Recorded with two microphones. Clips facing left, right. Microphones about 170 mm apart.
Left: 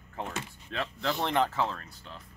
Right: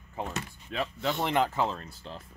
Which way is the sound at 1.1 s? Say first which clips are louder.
Right 1 dB; centre (ahead or behind).